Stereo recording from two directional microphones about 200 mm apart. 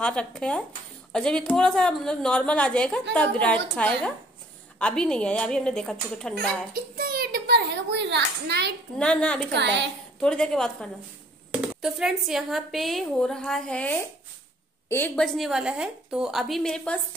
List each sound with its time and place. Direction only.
0.0 s a woman's voice: 5° left (ahead or behind)
6.7 s a child's voice: 50° right (ahead or behind)
8.9 s a woman's voice: 5° left (ahead or behind)
9.5 s a woman's voice: 60° right (ahead or behind)
10.2 s a woman's voice: 5° left (ahead or behind)